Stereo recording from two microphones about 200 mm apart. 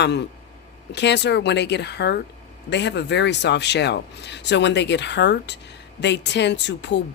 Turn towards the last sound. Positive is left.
turn(degrees=60)  # may be behind; listen again after turning